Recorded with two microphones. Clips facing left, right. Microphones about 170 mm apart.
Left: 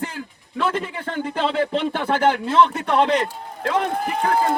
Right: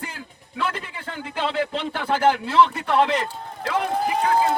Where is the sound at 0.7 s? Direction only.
50° left (ahead or behind).